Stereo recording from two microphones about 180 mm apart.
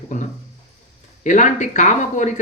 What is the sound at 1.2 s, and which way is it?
Speech, 45° left (ahead or behind).